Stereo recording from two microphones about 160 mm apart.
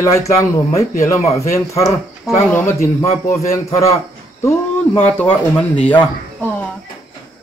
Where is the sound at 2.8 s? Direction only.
45° left (ahead or behind).